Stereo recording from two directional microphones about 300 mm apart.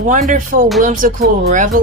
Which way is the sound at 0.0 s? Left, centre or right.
Right.